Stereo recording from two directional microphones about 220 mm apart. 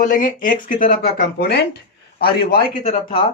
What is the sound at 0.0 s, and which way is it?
Speech, 35° left (ahead or behind).